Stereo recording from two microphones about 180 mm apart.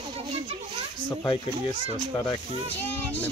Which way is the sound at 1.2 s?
25° left (ahead or behind).